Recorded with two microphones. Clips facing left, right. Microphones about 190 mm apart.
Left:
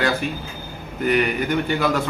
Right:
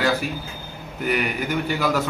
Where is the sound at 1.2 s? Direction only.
10° right (ahead or behind).